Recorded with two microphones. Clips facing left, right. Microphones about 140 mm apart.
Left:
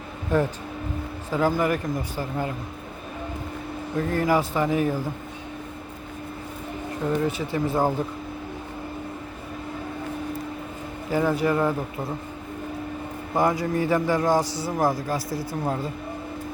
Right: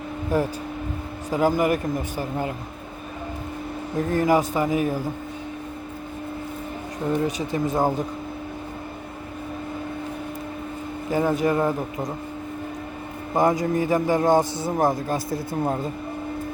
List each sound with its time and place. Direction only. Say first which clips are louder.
0.3 s speech: left 1 dB; 10° right (ahead or behind)
4.1 s speech: right 3 dB; 15° right (ahead or behind)
7.3 s speech: right 1 dB; 15° right (ahead or behind)
11.1 s speech: right 1 dB; 20° right (ahead or behind)
13.3 s a man's voice: right 2 dB; 20° right (ahead or behind)